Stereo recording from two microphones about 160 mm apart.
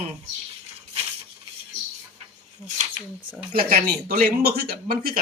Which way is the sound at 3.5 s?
70° right (ahead or behind).